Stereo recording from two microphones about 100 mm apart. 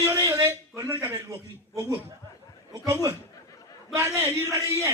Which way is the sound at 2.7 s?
35° right (ahead or behind).